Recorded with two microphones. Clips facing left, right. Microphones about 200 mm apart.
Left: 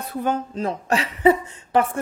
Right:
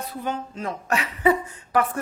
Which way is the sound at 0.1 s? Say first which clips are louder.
Left 7 dB; 50° left (ahead or behind).